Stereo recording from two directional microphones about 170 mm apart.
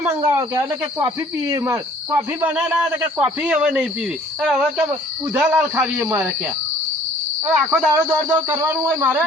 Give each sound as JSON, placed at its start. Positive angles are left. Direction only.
{"t": 0.0, "sound": "a man's voice", "side_deg": -15}
{"t": 7.4, "sound": "a man's voice", "side_deg": -5}